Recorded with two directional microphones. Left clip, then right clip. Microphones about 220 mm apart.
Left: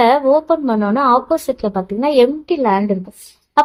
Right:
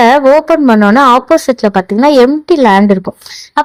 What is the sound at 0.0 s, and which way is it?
Speech, 35° right (ahead or behind).